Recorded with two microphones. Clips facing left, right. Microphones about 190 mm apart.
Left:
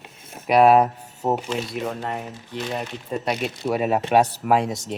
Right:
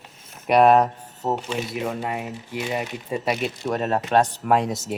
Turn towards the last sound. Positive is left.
turn(degrees=0)  # may be behind; listen again after turning